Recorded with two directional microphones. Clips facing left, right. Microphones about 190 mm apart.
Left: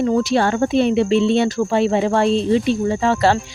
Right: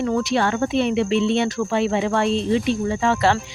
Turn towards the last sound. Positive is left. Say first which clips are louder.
# left 3 dB
turn(degrees=35)  # may be behind; listen again after turning